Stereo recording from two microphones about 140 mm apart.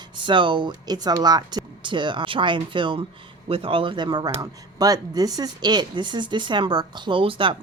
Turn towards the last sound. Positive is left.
turn(degrees=-40)  # may be behind; listen again after turning